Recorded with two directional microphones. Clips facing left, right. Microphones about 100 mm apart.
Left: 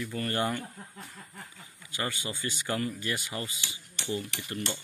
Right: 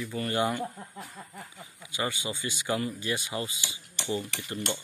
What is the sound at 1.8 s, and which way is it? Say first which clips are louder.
Speech: right 2 dB; 15° right (ahead or behind).